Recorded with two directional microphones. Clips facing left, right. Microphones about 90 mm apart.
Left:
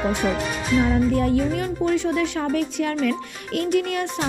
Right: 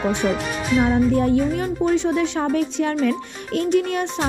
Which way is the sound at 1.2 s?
25° right (ahead or behind).